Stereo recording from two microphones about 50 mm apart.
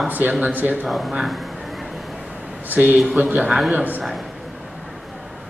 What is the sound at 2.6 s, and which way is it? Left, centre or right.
Speech, right.